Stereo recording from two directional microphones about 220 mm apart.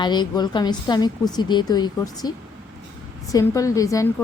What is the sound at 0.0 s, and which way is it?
A woman's voice, 20° left (ahead or behind).